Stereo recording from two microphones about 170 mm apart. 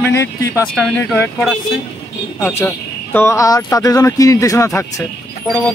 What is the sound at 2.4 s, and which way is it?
A man's voice, 15° left (ahead or behind).